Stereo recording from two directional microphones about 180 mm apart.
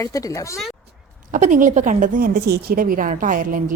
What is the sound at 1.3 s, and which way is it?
A woman's voice, 45° right (ahead or behind).